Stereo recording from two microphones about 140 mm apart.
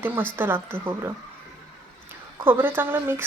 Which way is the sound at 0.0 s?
15° right (ahead or behind).